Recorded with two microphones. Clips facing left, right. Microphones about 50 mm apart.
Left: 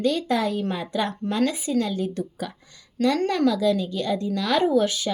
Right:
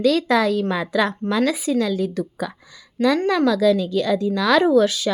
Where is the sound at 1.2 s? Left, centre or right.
Right.